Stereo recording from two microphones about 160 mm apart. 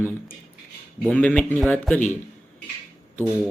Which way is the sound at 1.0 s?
10° left (ahead or behind).